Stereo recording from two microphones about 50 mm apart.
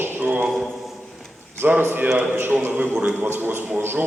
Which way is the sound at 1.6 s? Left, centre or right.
Right.